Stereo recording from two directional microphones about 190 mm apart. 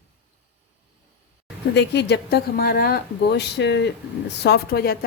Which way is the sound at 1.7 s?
60° left (ahead or behind).